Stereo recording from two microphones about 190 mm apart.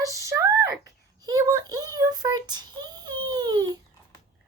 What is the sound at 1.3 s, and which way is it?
A child's voice, 20° right (ahead or behind).